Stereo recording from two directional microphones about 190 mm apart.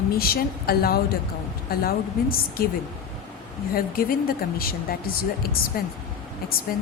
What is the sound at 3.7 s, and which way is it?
A woman's voice, 50° left (ahead or behind).